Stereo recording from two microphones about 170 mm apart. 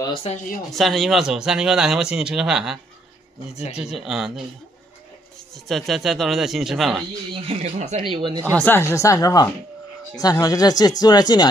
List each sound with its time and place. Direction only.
0.0 s speech: 35° left (ahead or behind)
0.7 s speech: centre (ahead or behind)
5.7 s speech: centre (ahead or behind)
7.3 s speech: 35° right (ahead or behind)
8.5 s speech: 10° left (ahead or behind)